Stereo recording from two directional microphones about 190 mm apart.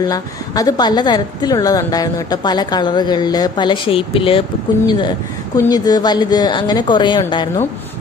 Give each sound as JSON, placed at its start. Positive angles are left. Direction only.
{"t": 0.0, "sound": "a woman's voice", "side_deg": 20}
{"t": 5.5, "sound": "a woman's voice", "side_deg": 20}